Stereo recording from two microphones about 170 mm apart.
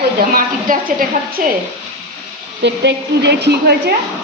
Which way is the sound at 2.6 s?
90° right.